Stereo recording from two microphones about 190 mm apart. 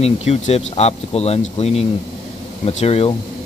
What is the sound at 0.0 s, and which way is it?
Speech, 35° left (ahead or behind).